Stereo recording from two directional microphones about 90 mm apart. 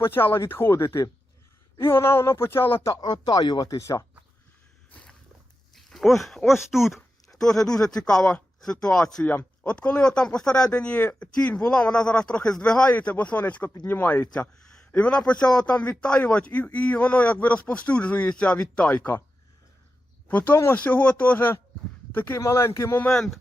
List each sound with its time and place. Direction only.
0.0 s speech: 25° left (ahead or behind)
3.1 s speech: 50° left (ahead or behind); by 4.0 s 35° left (ahead or behind)
4.9 s a sound: 15° left (ahead or behind)
5.7 s speech: 5° left (ahead or behind); by 14.3 s 20° left (ahead or behind)
14.3 s a man's voice: 10° left (ahead or behind)
20.2 s speech: 20° left (ahead or behind)
22.4 s speech: 30° left (ahead or behind)
23.1 s speech: 5° left (ahead or behind)